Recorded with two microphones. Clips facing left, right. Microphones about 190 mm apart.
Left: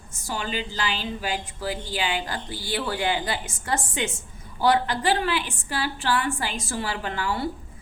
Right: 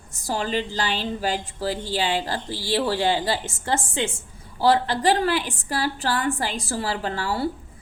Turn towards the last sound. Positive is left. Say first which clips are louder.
# right 2 dB
turn(degrees=-35)  # may be behind; listen again after turning